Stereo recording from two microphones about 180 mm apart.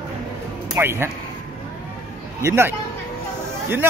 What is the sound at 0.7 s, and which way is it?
Speech, 15° right (ahead or behind).